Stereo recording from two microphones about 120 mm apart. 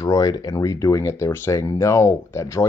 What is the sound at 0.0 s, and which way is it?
Speech, 30° left (ahead or behind).